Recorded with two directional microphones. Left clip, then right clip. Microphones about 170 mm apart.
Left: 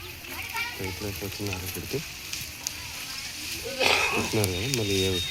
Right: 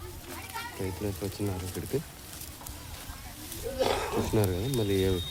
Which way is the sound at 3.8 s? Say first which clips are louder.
Left 6 dB; 20° left (ahead or behind).